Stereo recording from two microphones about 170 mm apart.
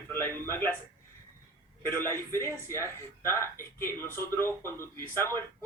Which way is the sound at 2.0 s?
15° left (ahead or behind).